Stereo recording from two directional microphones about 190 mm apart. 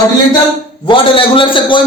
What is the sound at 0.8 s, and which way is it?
Speech, 30° left (ahead or behind).